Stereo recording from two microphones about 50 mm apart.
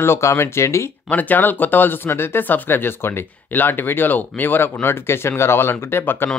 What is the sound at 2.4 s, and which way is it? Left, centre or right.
Speech, left.